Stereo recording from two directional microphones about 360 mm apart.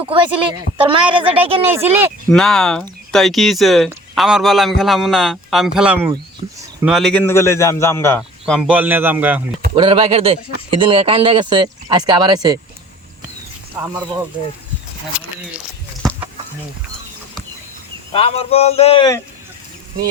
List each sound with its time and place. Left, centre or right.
0.1 s speech: centre
9.7 s speech: centre
15.1 s speech: centre
18.1 s speech: centre